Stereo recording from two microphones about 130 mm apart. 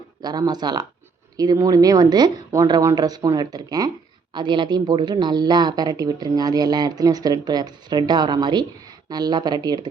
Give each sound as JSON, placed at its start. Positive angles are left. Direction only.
{"t": 0.2, "sound": "speech", "side_deg": -30}